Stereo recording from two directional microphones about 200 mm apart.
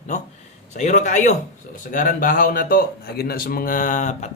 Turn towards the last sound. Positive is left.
turn(degrees=35)  # may be behind; listen again after turning